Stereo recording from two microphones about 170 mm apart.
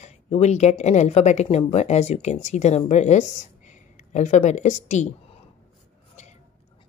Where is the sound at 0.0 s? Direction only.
40° left (ahead or behind).